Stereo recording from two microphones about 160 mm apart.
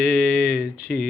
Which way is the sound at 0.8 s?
75° left (ahead or behind).